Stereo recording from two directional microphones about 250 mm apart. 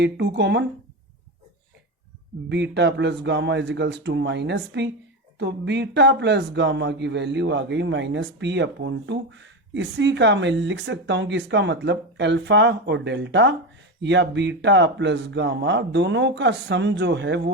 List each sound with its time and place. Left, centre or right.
0.0 s speech: right
2.5 s speech: right